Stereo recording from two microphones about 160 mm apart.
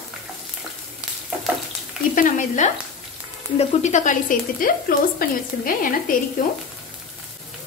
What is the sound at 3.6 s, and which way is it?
A woman's voice, 45° left (ahead or behind).